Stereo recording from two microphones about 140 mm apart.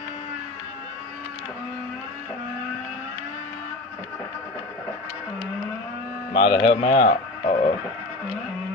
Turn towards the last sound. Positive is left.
turn(degrees=50)  # may be behind; listen again after turning